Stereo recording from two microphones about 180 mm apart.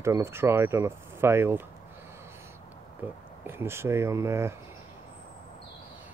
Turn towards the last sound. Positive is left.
turn(degrees=-15)  # may be behind; listen again after turning